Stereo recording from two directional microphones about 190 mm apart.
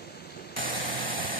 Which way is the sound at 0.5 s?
45° right (ahead or behind).